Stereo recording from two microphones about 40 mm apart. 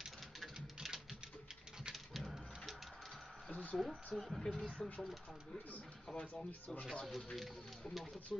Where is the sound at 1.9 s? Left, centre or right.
Centre.